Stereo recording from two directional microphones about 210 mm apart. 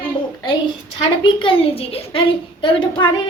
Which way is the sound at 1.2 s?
25° left (ahead or behind).